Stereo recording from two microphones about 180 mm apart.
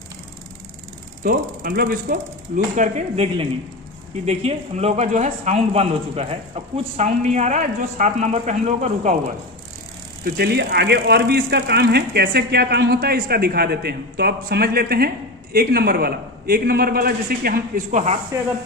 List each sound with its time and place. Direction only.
1.2 s mechanisms: 55° right (ahead or behind); by 3.4 s 40° right (ahead or behind)
4.3 s speech: 35° right (ahead or behind)
10.2 s speech: 60° right (ahead or behind); by 18.2 s 40° right (ahead or behind)